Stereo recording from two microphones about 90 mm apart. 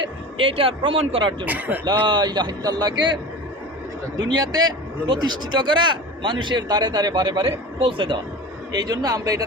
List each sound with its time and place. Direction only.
0.3 s speech: 85° right
1.5 s speech: 20° right (ahead or behind)
1.8 s speech: 55° right (ahead or behind)
4.3 s speech: 50° right (ahead or behind); by 8.2 s 75° right (ahead or behind)
8.7 s speech: 50° right (ahead or behind)